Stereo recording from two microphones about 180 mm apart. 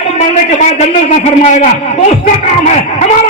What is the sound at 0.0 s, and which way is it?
A man's voice, 35° left (ahead or behind).